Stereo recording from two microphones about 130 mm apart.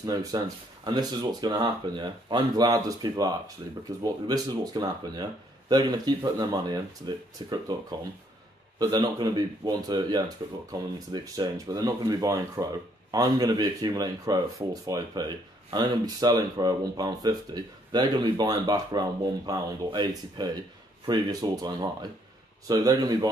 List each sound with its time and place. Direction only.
0.0 s speech: 30° right (ahead or behind)